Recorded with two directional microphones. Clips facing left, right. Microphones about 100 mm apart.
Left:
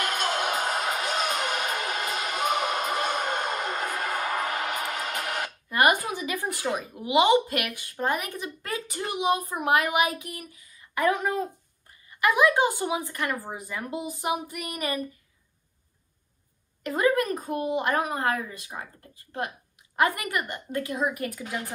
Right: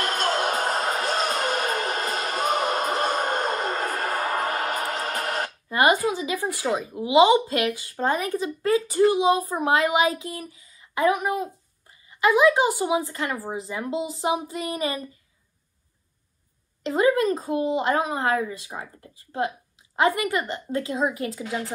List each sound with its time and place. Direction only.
0.0 s music: 45° right (ahead or behind)
5.7 s speech: 20° right (ahead or behind)
16.8 s speech: 20° right (ahead or behind)